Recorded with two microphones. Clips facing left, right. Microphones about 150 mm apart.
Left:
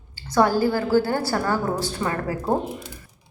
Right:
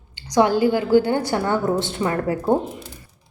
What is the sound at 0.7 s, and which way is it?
Speech, 15° right (ahead or behind).